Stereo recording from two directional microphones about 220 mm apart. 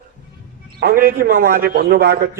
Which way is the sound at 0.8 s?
40° right (ahead or behind).